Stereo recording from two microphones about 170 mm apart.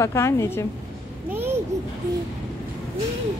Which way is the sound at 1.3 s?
10° right (ahead or behind).